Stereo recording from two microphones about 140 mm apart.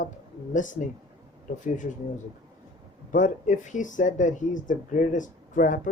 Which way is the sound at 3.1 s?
65° left (ahead or behind).